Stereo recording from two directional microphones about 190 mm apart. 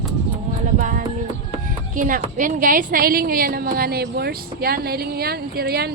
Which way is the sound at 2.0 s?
45° right (ahead or behind).